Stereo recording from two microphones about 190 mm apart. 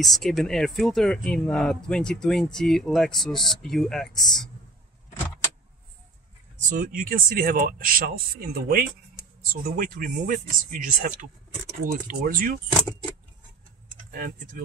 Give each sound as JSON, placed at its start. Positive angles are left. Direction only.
{"t": 0.0, "sound": "speech", "side_deg": 0}
{"t": 6.8, "sound": "speech", "side_deg": -45}
{"t": 14.1, "sound": "speech", "side_deg": -45}